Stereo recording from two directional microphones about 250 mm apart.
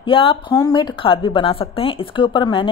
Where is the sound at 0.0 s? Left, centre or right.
Left.